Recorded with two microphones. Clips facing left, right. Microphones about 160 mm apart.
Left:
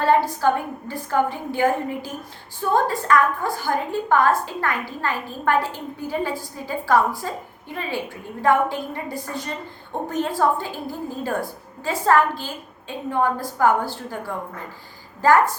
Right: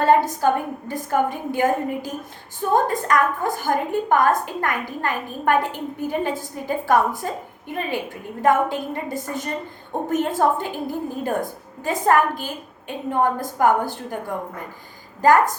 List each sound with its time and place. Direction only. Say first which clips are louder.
0.0 s a woman's voice: right 1 dB; 20° right (ahead or behind)